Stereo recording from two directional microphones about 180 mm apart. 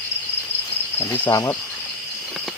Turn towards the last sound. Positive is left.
turn(degrees=20)  # may be behind; listen again after turning